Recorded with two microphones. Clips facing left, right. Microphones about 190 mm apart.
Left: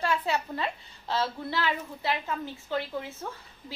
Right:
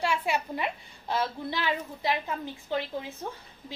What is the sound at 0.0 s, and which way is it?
A woman's voice, 10° right (ahead or behind).